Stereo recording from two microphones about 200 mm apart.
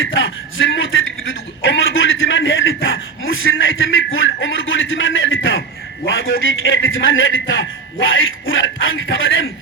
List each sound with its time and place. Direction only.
0.0 s a man's voice: 75° left (ahead or behind)